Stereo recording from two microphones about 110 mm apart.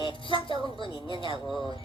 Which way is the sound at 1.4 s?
Centre (ahead or behind).